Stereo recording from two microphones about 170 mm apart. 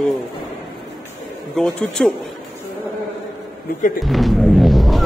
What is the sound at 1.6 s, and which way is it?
Speech, 5° left (ahead or behind).